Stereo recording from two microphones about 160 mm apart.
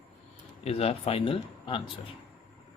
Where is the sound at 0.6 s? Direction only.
40° left (ahead or behind).